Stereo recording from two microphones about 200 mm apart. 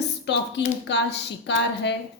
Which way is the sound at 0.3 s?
60° left (ahead or behind).